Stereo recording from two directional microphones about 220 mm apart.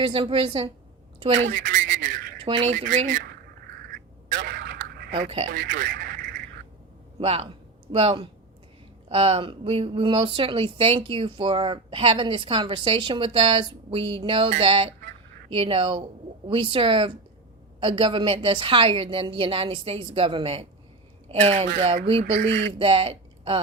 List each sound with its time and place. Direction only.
0.0 s speech: 25° right (ahead or behind)
1.5 s a sound: 40° right (ahead or behind)
2.4 s speech: 25° right (ahead or behind)
2.7 s a woman's voice: 35° right (ahead or behind)
4.3 s a sound: 40° right (ahead or behind)
7.2 s a woman's voice: 25° right (ahead or behind)
22.2 s speech: 55° right (ahead or behind)
22.8 s speech: 25° right (ahead or behind)